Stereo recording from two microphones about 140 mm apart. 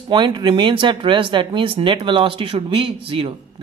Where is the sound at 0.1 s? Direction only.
35° right (ahead or behind).